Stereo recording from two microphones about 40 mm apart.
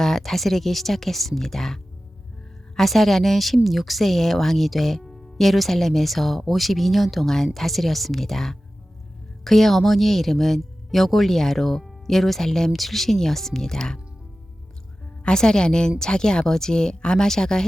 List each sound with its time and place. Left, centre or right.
0.0 s speech: centre
15.2 s speech: centre